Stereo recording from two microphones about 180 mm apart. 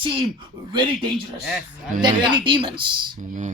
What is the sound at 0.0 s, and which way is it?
Speech, 30° right (ahead or behind).